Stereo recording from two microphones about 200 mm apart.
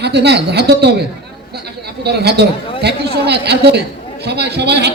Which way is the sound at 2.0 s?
55° right (ahead or behind).